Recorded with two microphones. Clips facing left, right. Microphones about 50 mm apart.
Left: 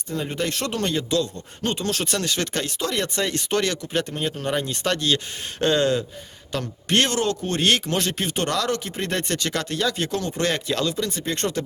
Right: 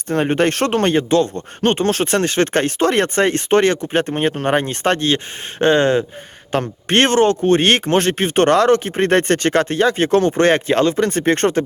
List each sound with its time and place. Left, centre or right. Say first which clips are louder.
0.1 s speech: right 10 dB; right